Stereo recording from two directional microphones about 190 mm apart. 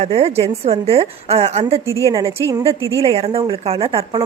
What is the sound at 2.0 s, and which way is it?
Speech, 15° right (ahead or behind).